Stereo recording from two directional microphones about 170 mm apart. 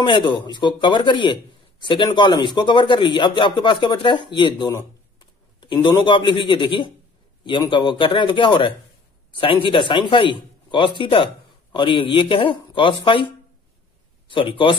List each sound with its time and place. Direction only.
0.0 s a man's voice: 30° left (ahead or behind)